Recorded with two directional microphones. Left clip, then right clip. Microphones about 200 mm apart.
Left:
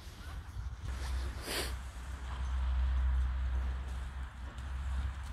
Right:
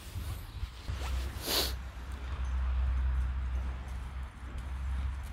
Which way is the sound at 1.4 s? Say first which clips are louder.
Right 7 dB; 20° right (ahead or behind).